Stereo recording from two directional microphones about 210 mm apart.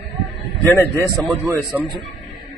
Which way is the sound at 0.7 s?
15° left (ahead or behind).